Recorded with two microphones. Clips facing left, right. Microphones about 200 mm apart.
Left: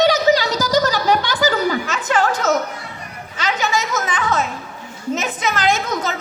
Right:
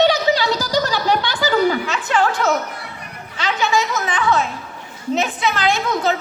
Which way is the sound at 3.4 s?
40° left (ahead or behind).